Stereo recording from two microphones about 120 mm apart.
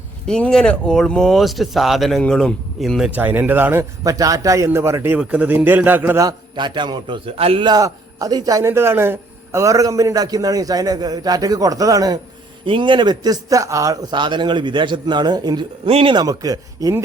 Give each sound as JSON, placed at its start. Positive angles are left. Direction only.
{"t": 0.3, "sound": "speech", "side_deg": 5}
{"t": 3.2, "sound": "a man's voice", "side_deg": -15}
{"t": 5.2, "sound": "a man's voice", "side_deg": -10}
{"t": 6.1, "sound": "a man's voice", "side_deg": -35}
{"t": 7.6, "sound": "a man's voice", "side_deg": -30}
{"t": 12.6, "sound": "a man's voice", "side_deg": -45}
{"t": 15.9, "sound": "speech", "side_deg": -55}
{"t": 16.1, "sound": "a man's voice", "side_deg": -30}